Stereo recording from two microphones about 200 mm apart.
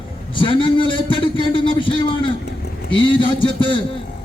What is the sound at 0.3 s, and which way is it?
A man's voice, 25° left (ahead or behind).